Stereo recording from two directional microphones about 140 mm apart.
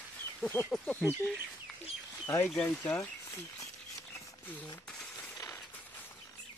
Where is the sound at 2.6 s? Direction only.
20° left (ahead or behind).